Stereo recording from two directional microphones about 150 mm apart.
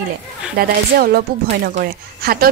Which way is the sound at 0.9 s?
90° right.